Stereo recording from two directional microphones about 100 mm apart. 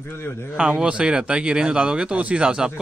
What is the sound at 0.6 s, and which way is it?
Speech, 10° right (ahead or behind).